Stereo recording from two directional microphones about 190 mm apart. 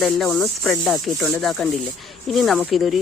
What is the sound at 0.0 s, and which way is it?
Speech, 5° left (ahead or behind).